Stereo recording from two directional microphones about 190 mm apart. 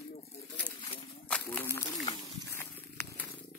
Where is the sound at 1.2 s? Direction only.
10° left (ahead or behind).